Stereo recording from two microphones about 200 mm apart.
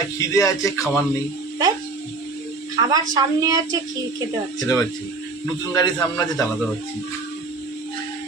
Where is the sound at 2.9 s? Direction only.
20° right (ahead or behind).